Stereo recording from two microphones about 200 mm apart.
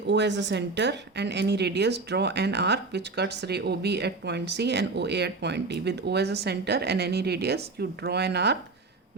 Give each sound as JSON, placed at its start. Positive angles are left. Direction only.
{"t": 0.1, "sound": "a woman's voice", "side_deg": -60}